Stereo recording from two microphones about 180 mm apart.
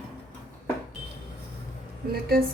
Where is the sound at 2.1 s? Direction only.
60° right (ahead or behind).